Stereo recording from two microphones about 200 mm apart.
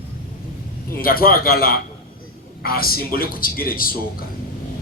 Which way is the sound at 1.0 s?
45° left (ahead or behind).